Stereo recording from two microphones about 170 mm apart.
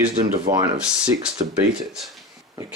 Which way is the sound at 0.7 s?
5° right (ahead or behind).